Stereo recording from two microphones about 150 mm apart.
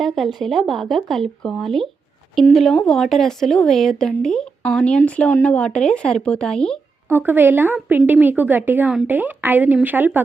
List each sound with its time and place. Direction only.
0.0 s speech: centre (ahead or behind)
7.1 s speech: 15° right (ahead or behind)